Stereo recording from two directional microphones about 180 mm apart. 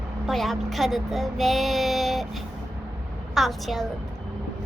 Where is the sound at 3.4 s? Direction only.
Centre (ahead or behind).